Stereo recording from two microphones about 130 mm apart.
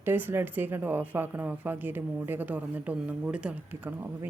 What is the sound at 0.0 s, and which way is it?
A woman's voice, 15° right (ahead or behind).